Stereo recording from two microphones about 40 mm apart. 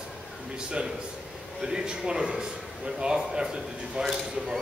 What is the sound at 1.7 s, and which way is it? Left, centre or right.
A man's voice, centre.